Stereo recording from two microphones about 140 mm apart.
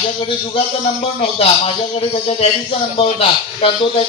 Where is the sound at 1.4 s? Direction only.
45° left (ahead or behind).